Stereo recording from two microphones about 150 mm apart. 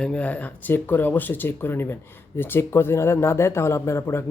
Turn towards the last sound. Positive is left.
turn(degrees=15)  # may be behind; listen again after turning